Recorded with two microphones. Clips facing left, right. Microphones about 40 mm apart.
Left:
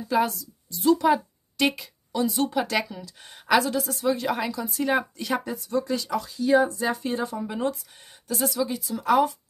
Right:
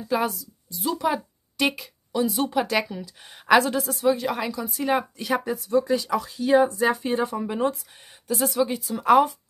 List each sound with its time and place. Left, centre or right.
0.1 s a woman's voice: centre
6.2 s speech: right
7.4 s speech: centre
8.5 s speech: right